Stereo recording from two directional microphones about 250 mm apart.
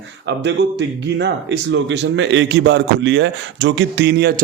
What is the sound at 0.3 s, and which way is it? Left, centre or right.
Speech, right.